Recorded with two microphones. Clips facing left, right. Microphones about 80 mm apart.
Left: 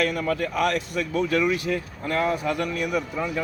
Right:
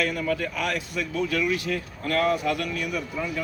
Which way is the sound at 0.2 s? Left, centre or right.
Left.